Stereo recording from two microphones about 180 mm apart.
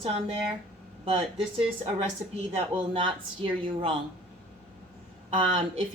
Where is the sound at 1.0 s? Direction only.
35° right (ahead or behind).